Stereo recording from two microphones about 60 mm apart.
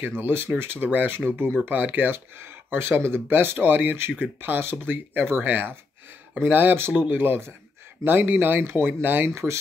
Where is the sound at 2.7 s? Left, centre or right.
Right.